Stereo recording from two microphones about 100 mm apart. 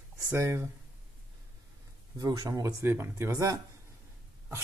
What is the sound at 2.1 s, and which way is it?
Speech, 40° right (ahead or behind).